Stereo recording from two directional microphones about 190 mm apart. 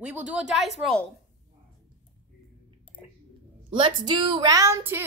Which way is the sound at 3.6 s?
25° right (ahead or behind).